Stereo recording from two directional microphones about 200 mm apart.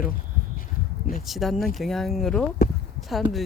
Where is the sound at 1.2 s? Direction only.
Centre (ahead or behind).